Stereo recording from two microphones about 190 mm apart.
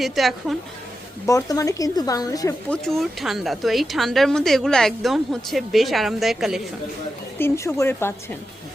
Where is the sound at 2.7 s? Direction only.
Centre (ahead or behind).